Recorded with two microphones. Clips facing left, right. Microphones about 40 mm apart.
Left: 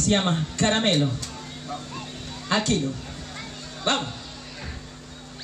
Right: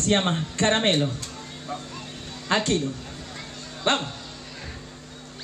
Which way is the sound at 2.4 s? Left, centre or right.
Right.